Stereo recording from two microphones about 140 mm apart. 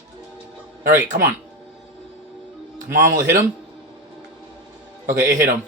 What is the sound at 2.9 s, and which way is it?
Speech, 75° right (ahead or behind).